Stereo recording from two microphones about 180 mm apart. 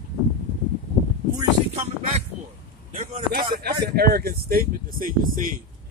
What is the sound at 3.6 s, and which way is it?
Speech, 60° right (ahead or behind).